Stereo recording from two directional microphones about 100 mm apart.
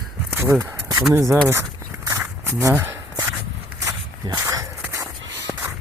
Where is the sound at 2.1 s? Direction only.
25° right (ahead or behind).